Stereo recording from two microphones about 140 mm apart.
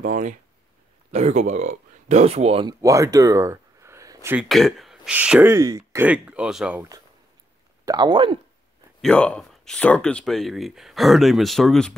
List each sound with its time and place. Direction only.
0.0 s speech: 60° right (ahead or behind); by 2.6 s 45° right (ahead or behind)
2.8 s speech: 20° right (ahead or behind)
4.4 s speech: centre (ahead or behind)
5.1 s speech: 10° right (ahead or behind)
5.5 s speech: 25° right (ahead or behind)
6.0 s speech: 10° right (ahead or behind)
7.8 s speech: 30° right (ahead or behind)
9.0 s speech: 10° left (ahead or behind)